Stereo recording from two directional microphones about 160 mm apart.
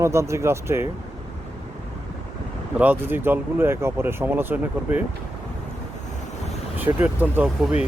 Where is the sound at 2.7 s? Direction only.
10° right (ahead or behind).